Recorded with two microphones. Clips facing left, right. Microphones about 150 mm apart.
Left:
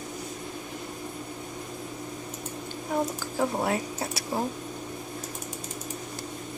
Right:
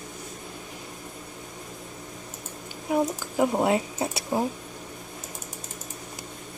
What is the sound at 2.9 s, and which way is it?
Speech, 20° right (ahead or behind).